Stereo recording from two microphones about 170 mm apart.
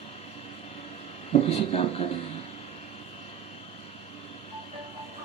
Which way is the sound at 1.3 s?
35° left (ahead or behind).